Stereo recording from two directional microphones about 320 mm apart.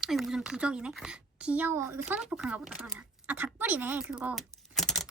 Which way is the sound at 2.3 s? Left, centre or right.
Centre.